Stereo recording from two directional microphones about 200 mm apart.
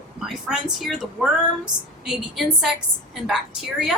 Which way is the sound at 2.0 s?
Centre (ahead or behind).